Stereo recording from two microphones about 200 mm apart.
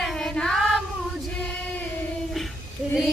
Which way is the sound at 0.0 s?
Centre (ahead or behind).